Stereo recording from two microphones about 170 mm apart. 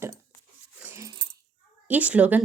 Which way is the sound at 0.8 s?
15° right (ahead or behind).